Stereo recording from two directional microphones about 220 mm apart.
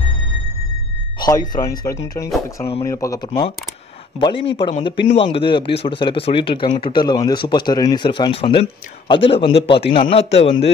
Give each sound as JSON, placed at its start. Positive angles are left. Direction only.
{"t": 1.5, "sound": "speech", "side_deg": 15}